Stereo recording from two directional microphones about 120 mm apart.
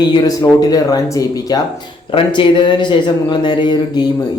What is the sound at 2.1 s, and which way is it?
Speech, 45° left (ahead or behind).